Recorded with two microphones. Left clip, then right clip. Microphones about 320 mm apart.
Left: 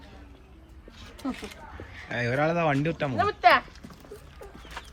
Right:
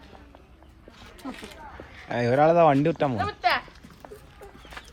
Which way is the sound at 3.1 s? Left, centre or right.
Centre.